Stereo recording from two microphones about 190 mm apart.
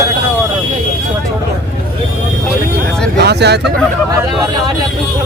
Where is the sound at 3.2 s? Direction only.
60° right (ahead or behind).